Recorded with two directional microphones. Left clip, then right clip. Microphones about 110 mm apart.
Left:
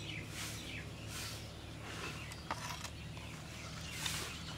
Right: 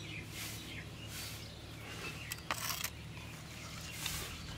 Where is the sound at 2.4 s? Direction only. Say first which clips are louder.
Right 4 dB; 15° right (ahead or behind).